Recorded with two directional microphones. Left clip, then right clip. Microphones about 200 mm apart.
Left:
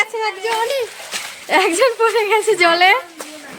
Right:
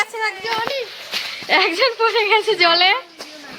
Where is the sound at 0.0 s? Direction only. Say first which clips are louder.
Left 2 dB; 15° left (ahead or behind).